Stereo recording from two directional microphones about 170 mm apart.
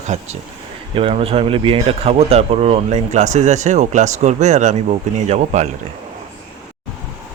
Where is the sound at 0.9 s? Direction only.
35° right (ahead or behind).